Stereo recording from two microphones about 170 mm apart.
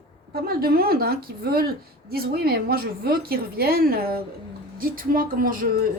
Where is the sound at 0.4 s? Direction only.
60° right (ahead or behind).